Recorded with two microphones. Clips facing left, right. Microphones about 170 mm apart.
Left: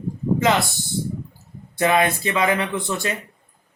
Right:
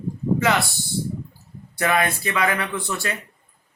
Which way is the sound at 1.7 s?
20° left (ahead or behind).